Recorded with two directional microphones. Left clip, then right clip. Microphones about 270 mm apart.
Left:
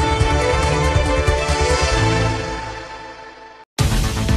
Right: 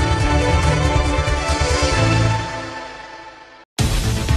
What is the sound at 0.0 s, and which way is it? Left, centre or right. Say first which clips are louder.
Music: left 1 dB; centre.